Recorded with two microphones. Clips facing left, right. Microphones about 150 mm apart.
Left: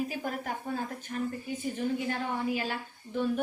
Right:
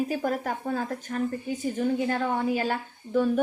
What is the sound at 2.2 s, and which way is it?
A woman's voice, 50° right (ahead or behind).